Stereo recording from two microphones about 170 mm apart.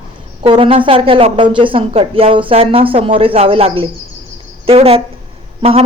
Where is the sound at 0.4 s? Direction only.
30° right (ahead or behind).